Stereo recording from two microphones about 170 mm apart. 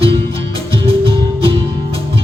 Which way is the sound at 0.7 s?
30° right (ahead or behind).